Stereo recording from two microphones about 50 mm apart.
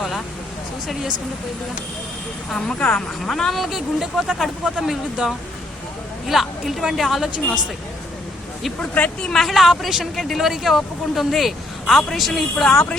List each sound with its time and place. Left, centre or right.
2.5 s a woman's voice: centre
2.7 s speech: left
3.2 s a woman's voice: centre
9.2 s a woman's voice: centre
9.5 s a woman's voice: centre